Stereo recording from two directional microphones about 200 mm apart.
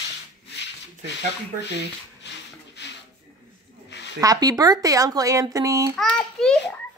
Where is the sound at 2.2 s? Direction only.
60° left (ahead or behind).